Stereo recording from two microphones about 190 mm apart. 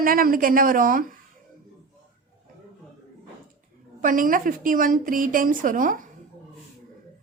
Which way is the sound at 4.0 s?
45° right (ahead or behind).